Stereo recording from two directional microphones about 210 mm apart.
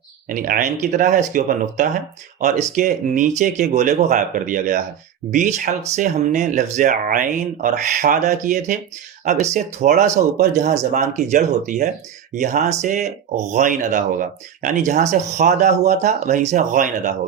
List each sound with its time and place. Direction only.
0.3 s speech: 40° right (ahead or behind)
10.0 s speech: 45° right (ahead or behind)